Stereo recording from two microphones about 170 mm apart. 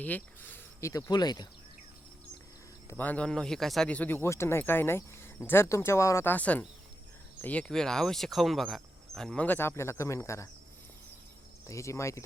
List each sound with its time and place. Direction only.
0.0 s speech: 10° left (ahead or behind)
3.0 s speech: 10° left (ahead or behind)
11.6 s speech: 15° left (ahead or behind)